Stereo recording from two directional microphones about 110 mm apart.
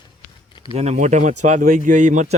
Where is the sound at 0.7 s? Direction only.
80° right.